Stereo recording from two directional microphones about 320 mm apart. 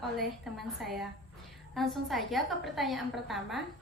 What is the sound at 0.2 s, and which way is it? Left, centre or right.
A woman's voice, centre.